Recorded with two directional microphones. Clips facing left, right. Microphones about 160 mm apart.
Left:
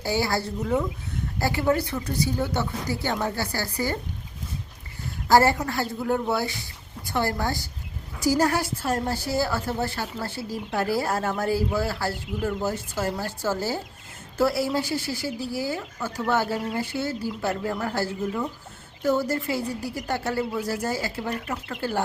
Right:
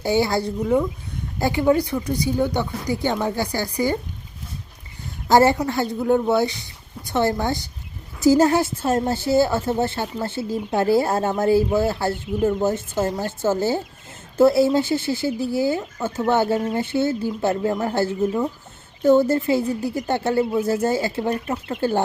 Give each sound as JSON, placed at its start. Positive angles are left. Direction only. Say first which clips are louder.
{"t": 0.0, "sound": "a woman's voice", "louder": "right 5 dB", "side_deg": -20}
{"t": 5.3, "sound": "a woman's voice", "louder": "right 3 dB", "side_deg": -20}